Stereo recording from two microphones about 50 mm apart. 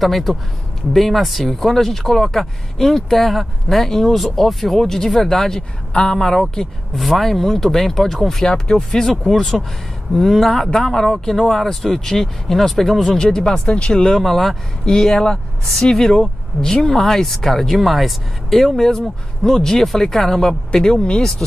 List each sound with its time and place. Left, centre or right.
0.0 s speech: centre
14.1 s speech: centre